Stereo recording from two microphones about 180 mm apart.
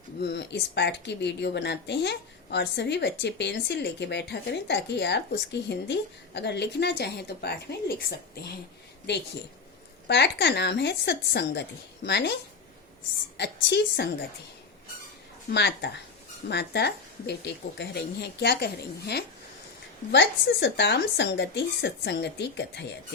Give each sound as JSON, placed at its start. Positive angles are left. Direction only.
{"t": 0.2, "sound": "speech", "side_deg": 65}
{"t": 10.1, "sound": "speech", "side_deg": 75}
{"t": 15.5, "sound": "speech", "side_deg": 70}